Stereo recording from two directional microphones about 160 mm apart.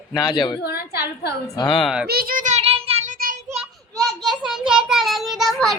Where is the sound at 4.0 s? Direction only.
Centre (ahead or behind).